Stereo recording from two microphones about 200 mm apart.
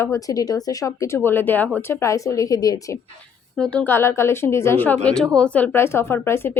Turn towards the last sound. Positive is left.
turn(degrees=10)  # may be behind; listen again after turning